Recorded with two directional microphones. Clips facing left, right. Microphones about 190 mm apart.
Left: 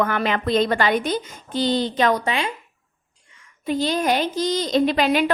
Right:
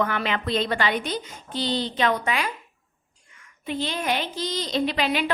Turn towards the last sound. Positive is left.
turn(degrees=45)  # may be behind; listen again after turning